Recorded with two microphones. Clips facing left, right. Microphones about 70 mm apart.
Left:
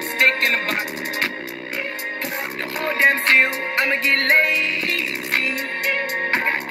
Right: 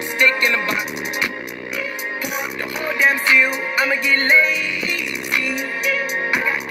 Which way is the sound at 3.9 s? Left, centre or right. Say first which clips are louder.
Right 3 dB; right.